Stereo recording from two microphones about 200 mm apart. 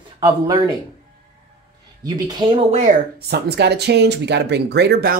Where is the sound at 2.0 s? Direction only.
20° right (ahead or behind).